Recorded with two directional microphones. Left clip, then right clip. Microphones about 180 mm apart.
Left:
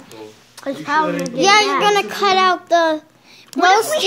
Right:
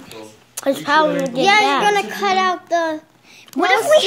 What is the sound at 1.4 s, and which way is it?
A child's voice, 25° left (ahead or behind).